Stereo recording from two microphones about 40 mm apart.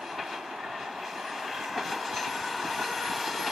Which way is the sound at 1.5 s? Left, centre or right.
Centre.